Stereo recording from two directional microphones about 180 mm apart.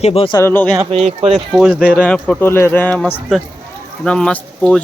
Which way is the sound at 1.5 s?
5° right (ahead or behind).